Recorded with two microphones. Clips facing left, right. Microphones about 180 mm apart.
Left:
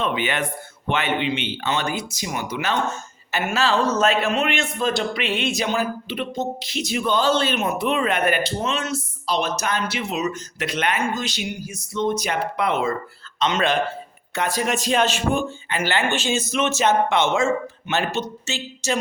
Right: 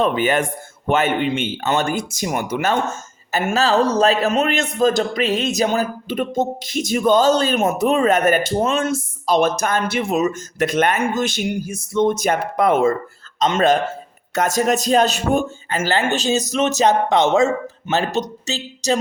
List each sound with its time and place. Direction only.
0.0 s a man's voice: 45° right (ahead or behind)